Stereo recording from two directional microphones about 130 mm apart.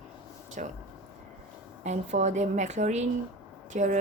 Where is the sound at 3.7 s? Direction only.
75° right (ahead or behind).